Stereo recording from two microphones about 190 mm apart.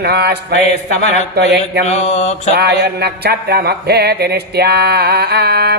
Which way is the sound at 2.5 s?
55° right (ahead or behind).